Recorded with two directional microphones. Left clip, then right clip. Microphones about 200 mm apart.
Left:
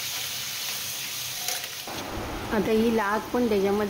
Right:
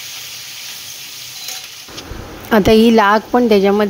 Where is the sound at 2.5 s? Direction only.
50° right (ahead or behind).